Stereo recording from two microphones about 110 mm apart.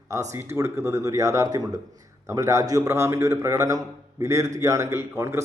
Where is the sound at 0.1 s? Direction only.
30° right (ahead or behind).